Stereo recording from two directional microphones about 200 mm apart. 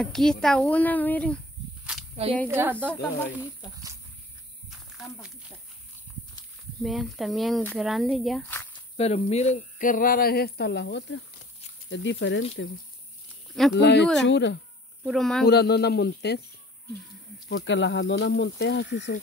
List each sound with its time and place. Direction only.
0.0 s speech: 5° left (ahead or behind)
2.4 s speech: 10° right (ahead or behind)
2.7 s speech: 5° left (ahead or behind)
4.6 s a sound: centre (ahead or behind)
6.8 s speech: centre (ahead or behind)
8.9 s speech: 30° left (ahead or behind); by 12.4 s 60° left (ahead or behind)
13.7 s speech: 60° left (ahead or behind)
15.0 s speech: centre (ahead or behind)
15.4 s speech: 55° left (ahead or behind)
17.5 s speech: 65° left (ahead or behind)